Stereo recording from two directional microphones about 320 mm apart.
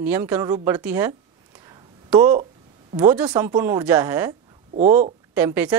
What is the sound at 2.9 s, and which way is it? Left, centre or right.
A woman's voice, centre.